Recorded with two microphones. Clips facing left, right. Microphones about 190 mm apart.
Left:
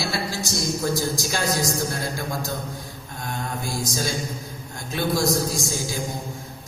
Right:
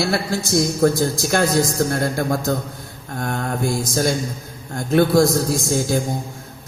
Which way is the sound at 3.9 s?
55° right (ahead or behind).